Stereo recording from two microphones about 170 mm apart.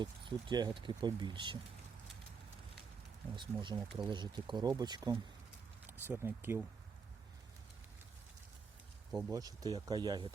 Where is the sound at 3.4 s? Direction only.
30° right (ahead or behind).